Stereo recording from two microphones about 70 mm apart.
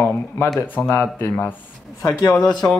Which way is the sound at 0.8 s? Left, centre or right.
Left.